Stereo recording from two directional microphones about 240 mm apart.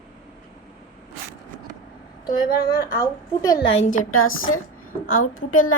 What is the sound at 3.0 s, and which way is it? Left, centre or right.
Speech, centre.